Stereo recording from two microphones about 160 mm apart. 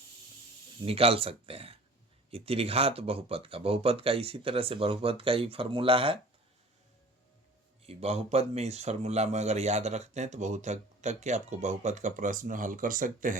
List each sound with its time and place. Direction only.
0.9 s speech: 35° right (ahead or behind)
7.9 s speech: 40° right (ahead or behind); by 13.3 s 60° right (ahead or behind)